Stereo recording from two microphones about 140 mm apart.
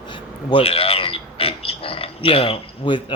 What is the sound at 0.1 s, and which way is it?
Speech, 40° left (ahead or behind).